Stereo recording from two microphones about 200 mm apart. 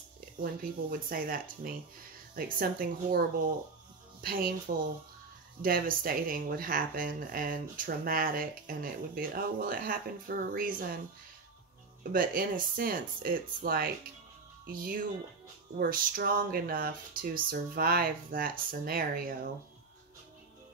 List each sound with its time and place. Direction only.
0.4 s speech: 45° right (ahead or behind)
5.6 s speech: 45° right (ahead or behind)
12.0 s speech: 45° right (ahead or behind)